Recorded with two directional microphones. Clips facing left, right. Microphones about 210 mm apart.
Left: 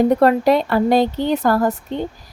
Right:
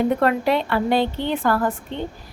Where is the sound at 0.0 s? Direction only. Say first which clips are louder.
Left 5 dB; 40° left (ahead or behind).